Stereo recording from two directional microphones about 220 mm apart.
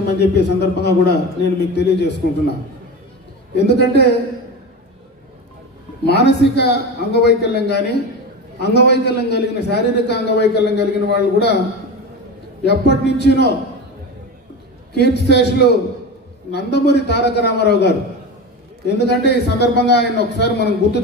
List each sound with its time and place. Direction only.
0.2 s a man's voice: 50° left (ahead or behind)
3.5 s a man's voice: 50° left (ahead or behind)
6.0 s a man's voice: 50° left (ahead or behind)
12.6 s a man's voice: 50° left (ahead or behind)
15.0 s a man's voice: 50° left (ahead or behind)